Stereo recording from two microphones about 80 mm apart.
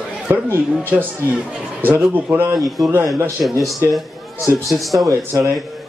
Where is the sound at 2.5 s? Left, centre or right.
Centre.